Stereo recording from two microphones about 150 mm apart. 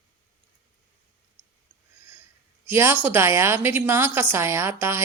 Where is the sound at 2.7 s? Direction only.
15° right (ahead or behind).